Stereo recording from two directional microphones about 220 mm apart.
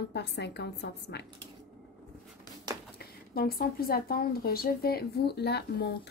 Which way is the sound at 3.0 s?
45° left (ahead or behind).